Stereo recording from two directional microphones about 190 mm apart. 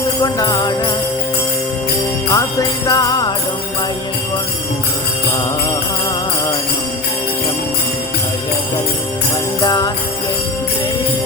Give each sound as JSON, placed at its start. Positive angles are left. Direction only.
{"t": 0.2, "sound": "jingle bell", "side_deg": 20}
{"t": 2.3, "sound": "jingle bell", "side_deg": 20}
{"t": 9.6, "sound": "jingle bell", "side_deg": 20}